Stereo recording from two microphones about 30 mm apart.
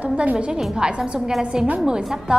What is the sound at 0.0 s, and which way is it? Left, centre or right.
Music, right.